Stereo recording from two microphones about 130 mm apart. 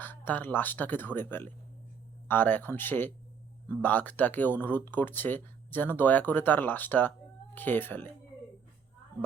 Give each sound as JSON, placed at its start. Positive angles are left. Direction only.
{"t": 0.0, "sound": "speech", "side_deg": 15}